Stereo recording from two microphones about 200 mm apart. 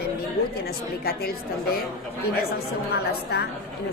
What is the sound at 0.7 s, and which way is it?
A woman's voice, 50° left (ahead or behind).